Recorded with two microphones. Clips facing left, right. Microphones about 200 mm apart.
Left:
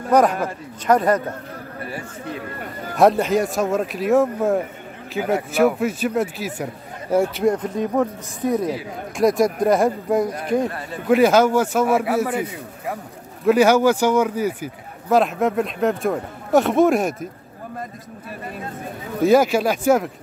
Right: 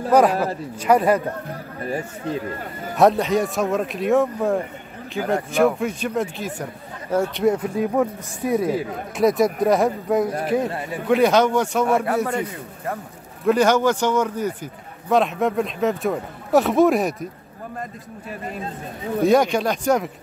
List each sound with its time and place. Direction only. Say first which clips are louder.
0.1 s speech: even; 5° right (ahead or behind)
3.0 s speech: left 1 dB; centre (ahead or behind)
7.4 s speech: even; 5° right (ahead or behind)
10.7 s a man's voice: right 3 dB; 20° right (ahead or behind)
11.1 s speech: left 2 dB; 5° left (ahead or behind)
13.5 s speech: left 2 dB; 10° left (ahead or behind)
19.2 s speech: left 2 dB; 5° left (ahead or behind)